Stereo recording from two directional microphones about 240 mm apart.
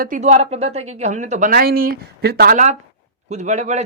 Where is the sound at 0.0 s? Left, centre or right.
Right.